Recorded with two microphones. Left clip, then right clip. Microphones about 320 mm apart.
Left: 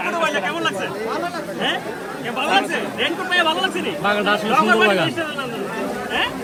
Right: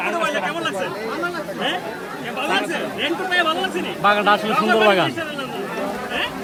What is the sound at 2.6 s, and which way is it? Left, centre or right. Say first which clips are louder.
Speech: left 2 dB; left.